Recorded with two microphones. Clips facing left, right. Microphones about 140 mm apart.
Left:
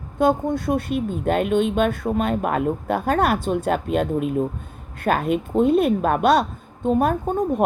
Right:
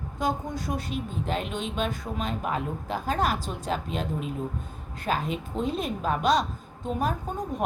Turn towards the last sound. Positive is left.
turn(degrees=60)  # may be behind; listen again after turning